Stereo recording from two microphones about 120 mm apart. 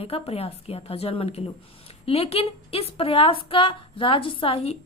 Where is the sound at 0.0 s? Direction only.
55° left (ahead or behind).